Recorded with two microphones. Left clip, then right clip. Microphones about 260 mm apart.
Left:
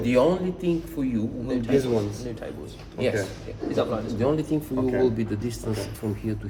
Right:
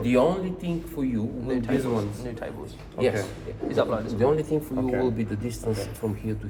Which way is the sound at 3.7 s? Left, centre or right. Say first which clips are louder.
Right 2 dB; centre.